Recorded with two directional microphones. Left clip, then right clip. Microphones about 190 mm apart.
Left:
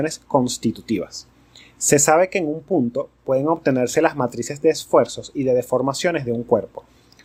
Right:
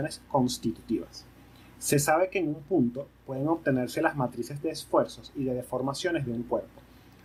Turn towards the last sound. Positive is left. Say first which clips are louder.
# left 10 dB
turn(degrees=40)  # may be behind; listen again after turning